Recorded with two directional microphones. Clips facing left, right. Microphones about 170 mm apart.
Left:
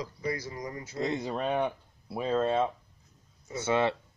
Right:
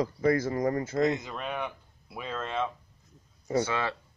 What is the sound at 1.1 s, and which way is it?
Speech, 30° left (ahead or behind).